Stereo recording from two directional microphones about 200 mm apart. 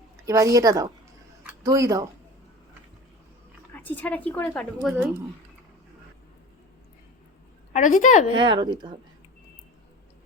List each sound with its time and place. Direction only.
0.3 s a woman's voice: 15° right (ahead or behind)
3.7 s a woman's voice: 10° left (ahead or behind)
4.8 s a woman's voice: centre (ahead or behind)
7.7 s a woman's voice: 40° left (ahead or behind)
8.4 s speech: 25° right (ahead or behind)